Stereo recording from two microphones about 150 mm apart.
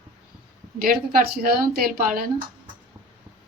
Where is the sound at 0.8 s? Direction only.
80° right.